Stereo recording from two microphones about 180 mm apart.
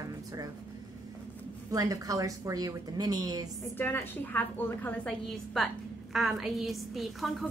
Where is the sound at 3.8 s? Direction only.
10° left (ahead or behind).